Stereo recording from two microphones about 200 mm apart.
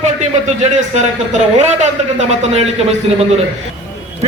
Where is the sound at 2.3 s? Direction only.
35° right (ahead or behind).